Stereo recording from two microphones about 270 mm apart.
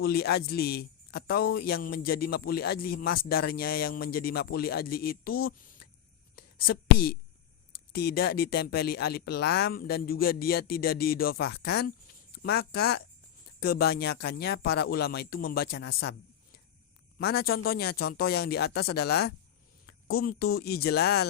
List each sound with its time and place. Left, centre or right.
0.0 s a man's voice: left
6.3 s a sound: left
7.9 s a man's voice: left
17.2 s a man's voice: left